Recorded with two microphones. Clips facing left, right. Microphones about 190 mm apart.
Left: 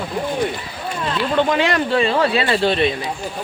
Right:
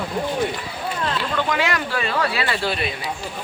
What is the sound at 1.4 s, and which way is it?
Speech, 25° left (ahead or behind).